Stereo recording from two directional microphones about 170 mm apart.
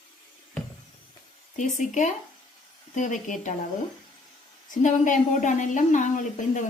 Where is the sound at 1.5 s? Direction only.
45° left (ahead or behind).